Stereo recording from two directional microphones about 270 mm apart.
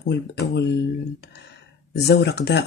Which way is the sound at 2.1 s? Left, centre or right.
Left.